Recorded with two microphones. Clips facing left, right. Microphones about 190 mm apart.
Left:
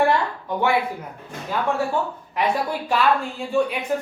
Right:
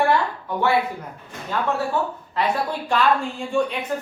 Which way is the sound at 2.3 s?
10° left (ahead or behind).